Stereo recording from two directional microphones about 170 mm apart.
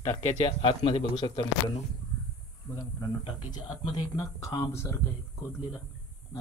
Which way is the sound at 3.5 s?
25° left (ahead or behind).